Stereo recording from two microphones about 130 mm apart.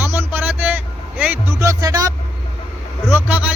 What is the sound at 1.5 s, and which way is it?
Music, 25° right (ahead or behind).